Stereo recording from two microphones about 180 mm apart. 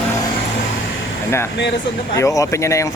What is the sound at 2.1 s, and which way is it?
Speech, 15° left (ahead or behind).